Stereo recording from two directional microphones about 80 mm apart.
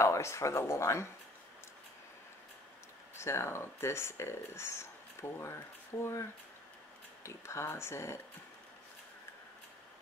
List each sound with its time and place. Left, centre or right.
0.0 s speech: left
3.2 s speech: left
7.2 s speech: left